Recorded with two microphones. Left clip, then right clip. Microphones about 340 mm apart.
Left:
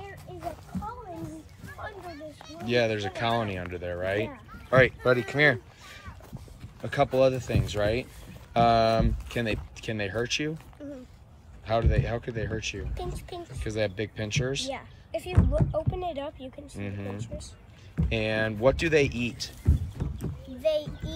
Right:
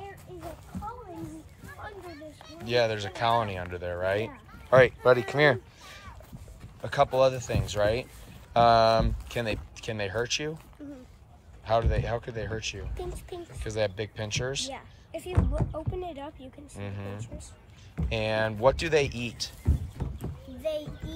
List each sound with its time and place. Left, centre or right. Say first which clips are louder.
2.6 s speech: even; centre
10.8 s a sound: left 4 dB; centre
11.6 s speech: right 1 dB; centre
20.0 s horse: left 2 dB; right
20.6 s speech: left 5 dB; centre